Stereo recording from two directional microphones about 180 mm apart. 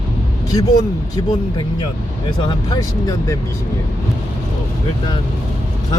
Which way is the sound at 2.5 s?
20° left (ahead or behind).